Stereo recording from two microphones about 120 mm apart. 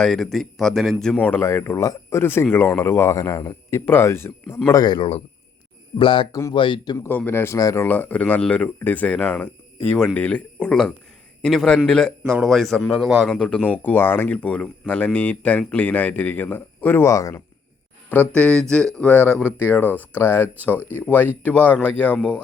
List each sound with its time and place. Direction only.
0.0 s speech: centre (ahead or behind)
1.0 s speech: 10° left (ahead or behind)
4.7 s speech: 35° left (ahead or behind)
6.0 s speech: 45° left (ahead or behind)
6.9 s speech: 20° left (ahead or behind)
7.9 s speech: 15° left (ahead or behind)
18.1 s speech: 10° left (ahead or behind)